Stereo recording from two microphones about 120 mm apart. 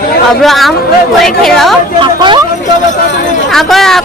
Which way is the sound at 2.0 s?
40° right (ahead or behind).